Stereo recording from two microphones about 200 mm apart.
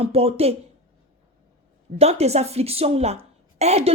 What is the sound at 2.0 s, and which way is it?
A woman's voice, 30° right (ahead or behind).